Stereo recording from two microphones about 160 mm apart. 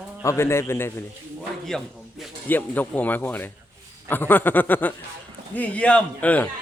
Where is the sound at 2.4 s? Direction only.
10° left (ahead or behind).